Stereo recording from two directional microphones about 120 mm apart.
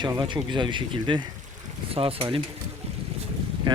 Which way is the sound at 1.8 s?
50° right (ahead or behind).